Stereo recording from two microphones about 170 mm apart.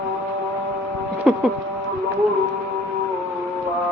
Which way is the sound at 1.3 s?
Centre (ahead or behind).